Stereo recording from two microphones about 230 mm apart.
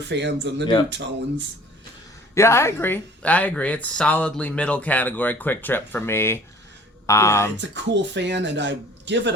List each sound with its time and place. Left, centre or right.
0.1 s speech: right
2.3 s speech: centre
7.5 s speech: right